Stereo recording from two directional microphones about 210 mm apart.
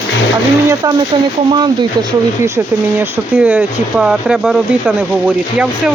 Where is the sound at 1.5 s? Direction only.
20° right (ahead or behind); by 5.9 s 5° right (ahead or behind).